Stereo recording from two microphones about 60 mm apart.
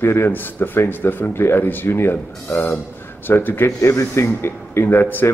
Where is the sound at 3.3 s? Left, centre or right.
Left.